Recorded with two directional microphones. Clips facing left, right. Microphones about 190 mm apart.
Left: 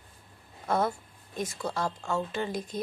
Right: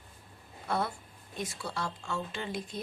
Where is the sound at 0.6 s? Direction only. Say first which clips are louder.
Left 5 dB; 45° left (ahead or behind).